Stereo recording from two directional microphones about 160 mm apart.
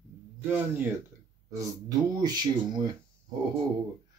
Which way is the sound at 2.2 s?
25° right (ahead or behind).